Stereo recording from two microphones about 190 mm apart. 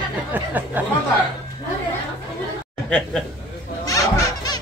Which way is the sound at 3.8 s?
15° left (ahead or behind).